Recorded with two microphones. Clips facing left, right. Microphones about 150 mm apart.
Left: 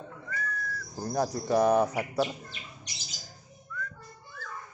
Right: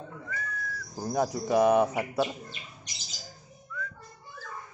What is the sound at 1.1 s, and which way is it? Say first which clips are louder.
Speech: right 1 dB; 5° right (ahead or behind).